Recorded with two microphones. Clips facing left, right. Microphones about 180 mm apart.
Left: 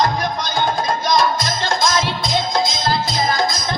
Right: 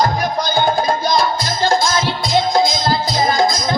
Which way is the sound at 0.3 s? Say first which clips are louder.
Right 4 dB; 30° right (ahead or behind).